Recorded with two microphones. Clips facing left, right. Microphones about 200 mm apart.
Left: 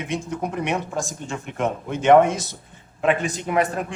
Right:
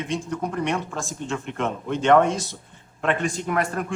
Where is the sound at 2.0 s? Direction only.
20° left (ahead or behind).